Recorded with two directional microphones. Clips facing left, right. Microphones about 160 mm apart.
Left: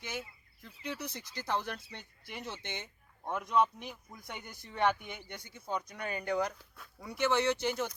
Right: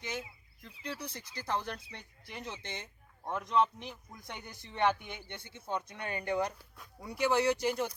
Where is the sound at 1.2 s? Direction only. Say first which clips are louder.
Left 2 dB; 10° right (ahead or behind).